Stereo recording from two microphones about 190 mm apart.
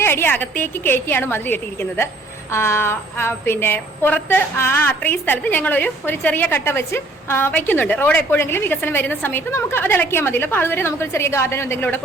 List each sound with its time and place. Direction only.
0.0 s a woman's voice: 10° left (ahead or behind)